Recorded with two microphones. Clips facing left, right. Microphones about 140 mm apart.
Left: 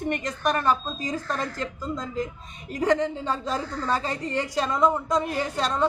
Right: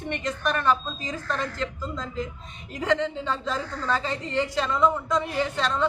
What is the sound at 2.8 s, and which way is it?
A woman's voice, 40° left (ahead or behind).